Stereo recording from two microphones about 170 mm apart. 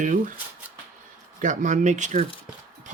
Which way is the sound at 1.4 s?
45° right (ahead or behind).